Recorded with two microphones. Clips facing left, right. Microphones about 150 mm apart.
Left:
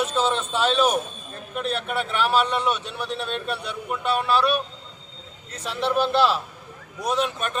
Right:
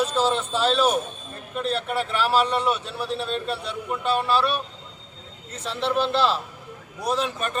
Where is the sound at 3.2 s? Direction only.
30° right (ahead or behind).